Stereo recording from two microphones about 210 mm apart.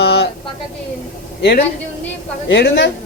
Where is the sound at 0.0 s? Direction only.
50° left (ahead or behind).